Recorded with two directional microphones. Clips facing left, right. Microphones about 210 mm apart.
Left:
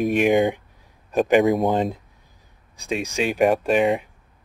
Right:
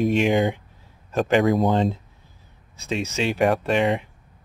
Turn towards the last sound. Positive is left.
turn(degrees=15)  # may be behind; listen again after turning